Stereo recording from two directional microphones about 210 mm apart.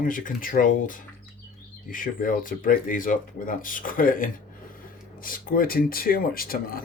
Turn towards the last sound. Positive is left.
turn(degrees=45)  # may be behind; listen again after turning